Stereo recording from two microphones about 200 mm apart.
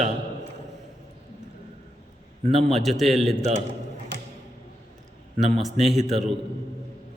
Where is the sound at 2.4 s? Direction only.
35° right (ahead or behind).